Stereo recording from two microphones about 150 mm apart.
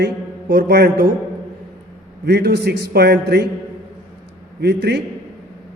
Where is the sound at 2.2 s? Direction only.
90° right.